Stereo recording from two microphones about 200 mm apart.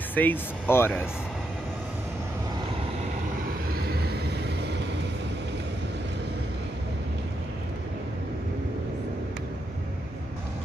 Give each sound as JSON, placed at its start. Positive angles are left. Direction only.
{"t": 0.1, "sound": "speech", "side_deg": 10}
{"t": 3.8, "sound": "vehicle", "side_deg": -50}